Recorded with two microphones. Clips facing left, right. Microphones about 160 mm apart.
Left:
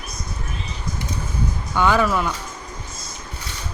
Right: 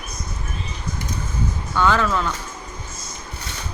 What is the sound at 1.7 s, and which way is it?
Speech, 10° left (ahead or behind).